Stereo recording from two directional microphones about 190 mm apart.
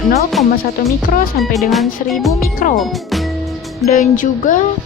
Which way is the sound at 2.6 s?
45° left (ahead or behind).